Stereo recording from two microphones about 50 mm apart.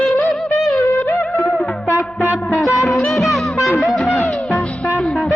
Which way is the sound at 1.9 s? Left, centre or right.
Left.